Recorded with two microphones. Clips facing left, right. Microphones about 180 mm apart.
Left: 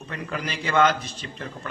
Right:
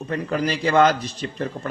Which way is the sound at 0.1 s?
40° right (ahead or behind).